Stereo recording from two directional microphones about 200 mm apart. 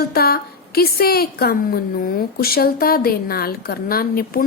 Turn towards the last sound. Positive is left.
turn(degrees=45)  # may be behind; listen again after turning